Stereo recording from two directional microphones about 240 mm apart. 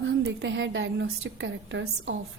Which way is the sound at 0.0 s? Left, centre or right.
Right.